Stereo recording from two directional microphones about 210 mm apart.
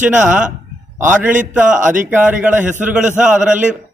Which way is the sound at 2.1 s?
10° right (ahead or behind).